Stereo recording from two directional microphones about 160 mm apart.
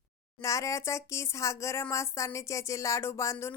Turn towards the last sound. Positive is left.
turn(degrees=20)  # may be behind; listen again after turning